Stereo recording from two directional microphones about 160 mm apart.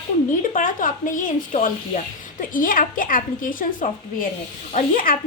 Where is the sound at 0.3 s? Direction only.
55° left (ahead or behind).